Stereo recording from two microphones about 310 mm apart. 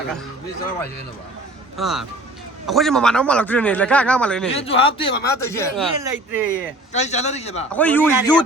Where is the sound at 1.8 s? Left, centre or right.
Centre.